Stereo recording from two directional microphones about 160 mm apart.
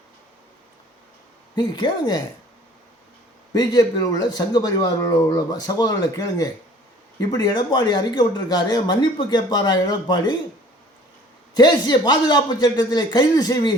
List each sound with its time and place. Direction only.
1.5 s speech: 30° left (ahead or behind)
3.5 s speech: 25° left (ahead or behind)
11.5 s speech: 25° left (ahead or behind)